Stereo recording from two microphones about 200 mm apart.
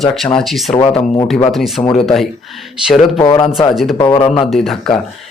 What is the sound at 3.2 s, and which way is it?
Speech, 20° left (ahead or behind).